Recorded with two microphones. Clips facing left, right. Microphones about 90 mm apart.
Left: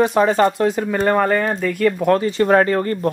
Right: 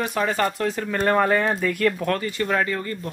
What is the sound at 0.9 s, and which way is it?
Speech, centre (ahead or behind).